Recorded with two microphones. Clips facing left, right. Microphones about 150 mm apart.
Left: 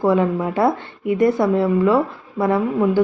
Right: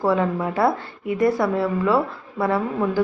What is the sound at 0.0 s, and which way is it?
Speech, 20° left (ahead or behind).